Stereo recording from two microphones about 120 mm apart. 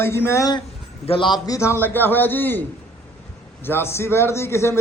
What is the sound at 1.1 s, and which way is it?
A man's voice, 40° left (ahead or behind).